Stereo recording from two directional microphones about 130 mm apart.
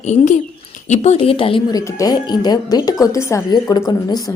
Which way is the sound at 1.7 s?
25° left (ahead or behind).